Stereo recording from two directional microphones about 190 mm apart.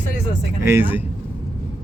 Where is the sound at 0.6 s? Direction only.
10° right (ahead or behind).